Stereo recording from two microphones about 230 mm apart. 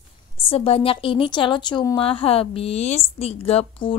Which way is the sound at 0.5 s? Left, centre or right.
Left.